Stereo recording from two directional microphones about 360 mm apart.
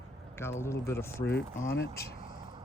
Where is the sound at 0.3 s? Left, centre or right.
Centre.